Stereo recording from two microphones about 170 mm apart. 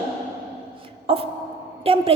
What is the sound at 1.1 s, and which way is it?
A woman's voice, 35° right (ahead or behind).